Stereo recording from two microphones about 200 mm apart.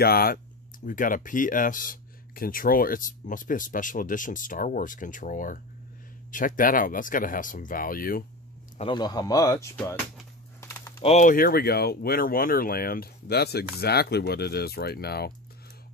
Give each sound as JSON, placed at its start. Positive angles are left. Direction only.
{"t": 0.0, "sound": "speech", "side_deg": 50}
{"t": 8.7, "sound": "speech", "side_deg": 25}
{"t": 10.6, "sound": "typing", "side_deg": 15}
{"t": 11.0, "sound": "speech", "side_deg": 35}